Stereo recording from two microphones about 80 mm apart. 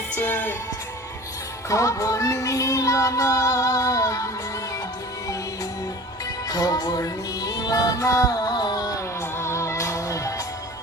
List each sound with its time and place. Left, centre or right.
0.2 s music: left
1.7 s music: left
6.5 s music: left
9.4 s music: left